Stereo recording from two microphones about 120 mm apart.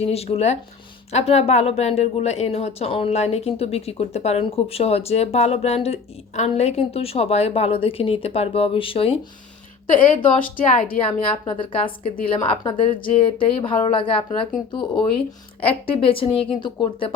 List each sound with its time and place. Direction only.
0.0 s speech: 60° left (ahead or behind)
11.0 s a woman's voice: 50° left (ahead or behind)
15.6 s a woman's voice: 50° left (ahead or behind)